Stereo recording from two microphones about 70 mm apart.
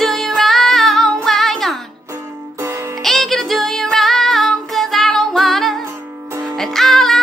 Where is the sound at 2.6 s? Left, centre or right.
Right.